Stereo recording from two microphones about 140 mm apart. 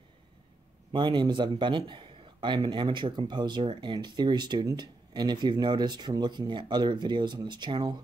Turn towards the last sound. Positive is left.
turn(degrees=-30)  # may be behind; listen again after turning